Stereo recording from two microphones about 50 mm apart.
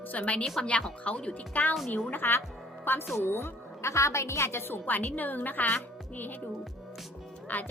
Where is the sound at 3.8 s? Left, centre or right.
Left.